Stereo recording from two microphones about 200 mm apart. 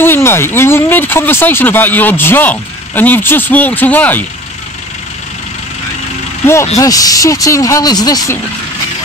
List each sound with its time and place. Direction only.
0.0 s speech: 10° left (ahead or behind)
6.4 s speech: 15° left (ahead or behind)